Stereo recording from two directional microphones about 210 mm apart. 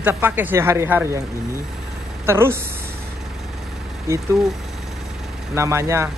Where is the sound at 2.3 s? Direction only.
10° right (ahead or behind).